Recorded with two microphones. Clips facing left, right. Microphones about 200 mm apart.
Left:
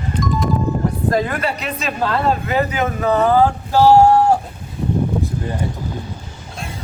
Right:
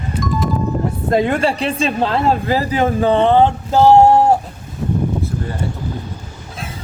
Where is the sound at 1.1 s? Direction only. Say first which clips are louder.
Right 6 dB; 25° right (ahead or behind).